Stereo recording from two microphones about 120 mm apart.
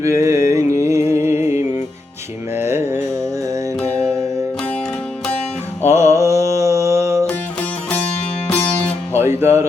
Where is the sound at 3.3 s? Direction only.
25° right (ahead or behind).